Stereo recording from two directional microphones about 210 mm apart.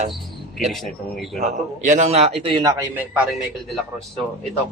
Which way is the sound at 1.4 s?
35° right (ahead or behind).